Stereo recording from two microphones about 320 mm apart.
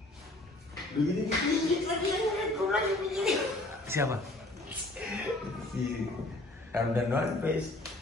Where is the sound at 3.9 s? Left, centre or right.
Centre.